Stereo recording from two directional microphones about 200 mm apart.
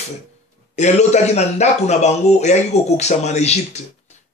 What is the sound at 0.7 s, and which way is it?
Speech, 35° left (ahead or behind).